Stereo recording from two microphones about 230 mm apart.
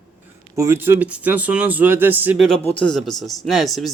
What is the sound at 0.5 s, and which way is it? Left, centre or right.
Speech, centre.